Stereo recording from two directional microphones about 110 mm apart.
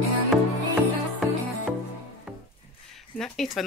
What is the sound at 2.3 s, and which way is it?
Music, 15° right (ahead or behind).